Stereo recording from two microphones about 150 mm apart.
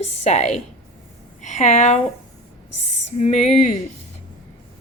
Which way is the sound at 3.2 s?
45° left (ahead or behind).